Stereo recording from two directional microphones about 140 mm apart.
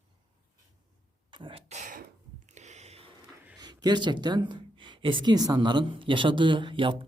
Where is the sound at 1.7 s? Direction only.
65° right (ahead or behind).